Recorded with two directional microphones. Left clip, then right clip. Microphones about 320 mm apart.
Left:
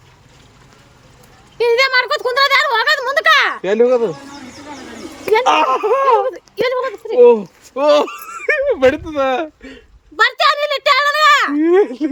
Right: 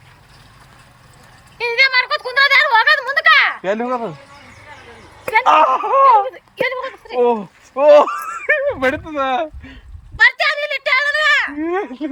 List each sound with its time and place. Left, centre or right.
1.5 s speech: centre
3.6 s speech: centre
5.3 s speech: centre
6.2 s speech: centre
10.2 s a sound: left
11.6 s a child's voice: centre